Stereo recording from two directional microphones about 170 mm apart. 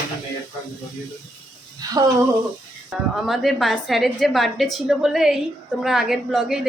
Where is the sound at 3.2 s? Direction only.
Centre (ahead or behind).